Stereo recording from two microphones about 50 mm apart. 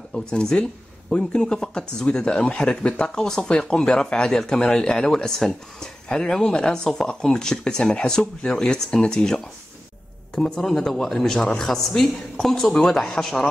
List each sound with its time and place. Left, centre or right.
0.1 s speech: centre